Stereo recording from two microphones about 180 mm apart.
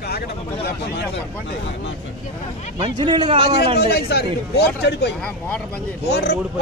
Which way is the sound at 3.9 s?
65° left (ahead or behind).